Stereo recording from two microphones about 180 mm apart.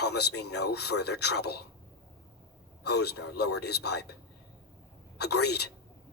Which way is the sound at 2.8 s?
65° left (ahead or behind).